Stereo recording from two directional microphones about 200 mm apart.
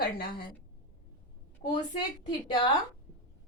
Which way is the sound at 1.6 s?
40° left (ahead or behind).